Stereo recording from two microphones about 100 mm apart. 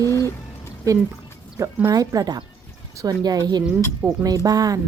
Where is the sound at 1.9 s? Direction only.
40° right (ahead or behind).